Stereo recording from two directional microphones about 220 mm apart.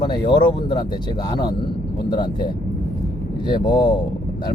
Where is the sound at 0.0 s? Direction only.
20° left (ahead or behind).